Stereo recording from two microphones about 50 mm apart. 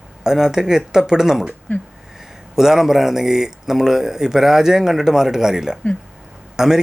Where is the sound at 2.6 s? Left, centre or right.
Centre.